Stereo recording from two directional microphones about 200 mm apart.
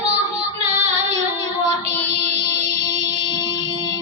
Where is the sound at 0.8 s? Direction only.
35° right (ahead or behind).